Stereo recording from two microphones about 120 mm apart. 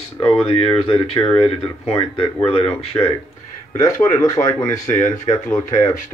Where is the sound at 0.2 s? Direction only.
45° left (ahead or behind).